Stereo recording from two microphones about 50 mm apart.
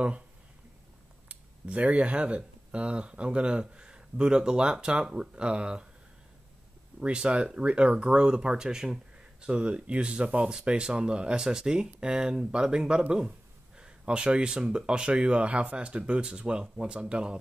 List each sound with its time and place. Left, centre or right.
1.3 s speech: right
7.0 s speech: centre